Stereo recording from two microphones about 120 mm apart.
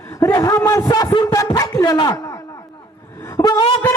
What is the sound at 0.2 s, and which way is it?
A man's voice, 30° left (ahead or behind).